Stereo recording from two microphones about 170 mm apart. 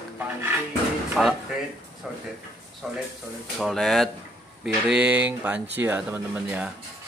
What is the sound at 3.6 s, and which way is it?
Speech, centre (ahead or behind).